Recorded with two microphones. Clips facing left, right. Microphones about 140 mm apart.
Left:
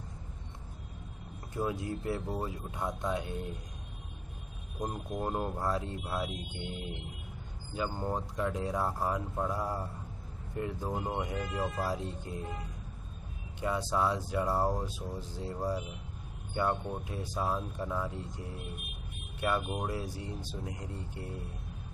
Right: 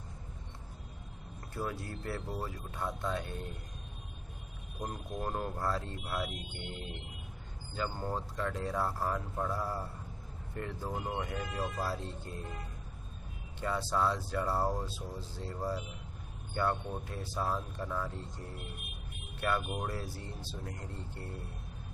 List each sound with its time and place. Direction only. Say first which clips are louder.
1.5 s speech: left 5 dB; 15° left (ahead or behind)
4.7 s speech: left 3 dB; 20° left (ahead or behind)
13.6 s speech: left 1 dB; 15° left (ahead or behind)